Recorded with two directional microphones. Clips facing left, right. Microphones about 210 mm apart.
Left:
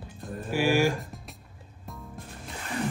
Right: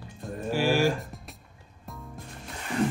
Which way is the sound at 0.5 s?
10° left (ahead or behind).